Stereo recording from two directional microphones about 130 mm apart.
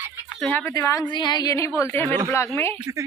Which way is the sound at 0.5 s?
20° left (ahead or behind).